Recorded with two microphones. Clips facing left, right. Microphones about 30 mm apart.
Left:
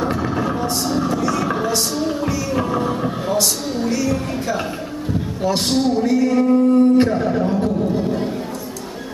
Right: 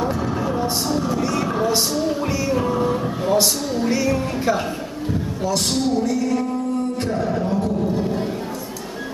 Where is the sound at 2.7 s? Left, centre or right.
Centre.